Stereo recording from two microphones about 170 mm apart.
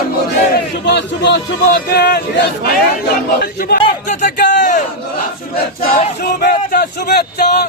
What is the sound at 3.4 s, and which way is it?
Speech, 60° left (ahead or behind).